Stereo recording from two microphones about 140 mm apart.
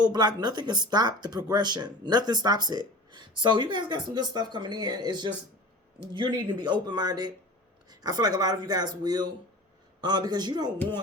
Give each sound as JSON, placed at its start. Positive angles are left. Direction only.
{"t": 0.1, "sound": "speech", "side_deg": -30}